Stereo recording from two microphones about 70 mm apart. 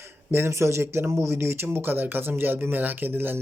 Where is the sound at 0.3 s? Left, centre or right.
Right.